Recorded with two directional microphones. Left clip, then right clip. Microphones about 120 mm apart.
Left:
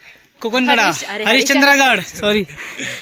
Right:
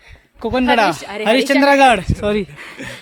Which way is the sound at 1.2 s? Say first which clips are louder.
Left 1 dB; 35° right (ahead or behind).